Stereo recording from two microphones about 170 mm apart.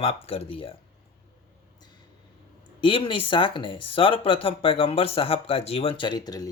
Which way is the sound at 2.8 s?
30° left (ahead or behind).